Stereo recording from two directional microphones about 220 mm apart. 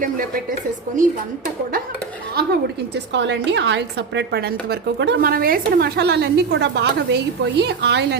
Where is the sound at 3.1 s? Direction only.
55° right (ahead or behind).